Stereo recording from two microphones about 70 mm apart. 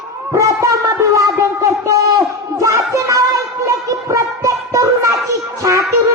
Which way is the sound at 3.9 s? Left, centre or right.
Right.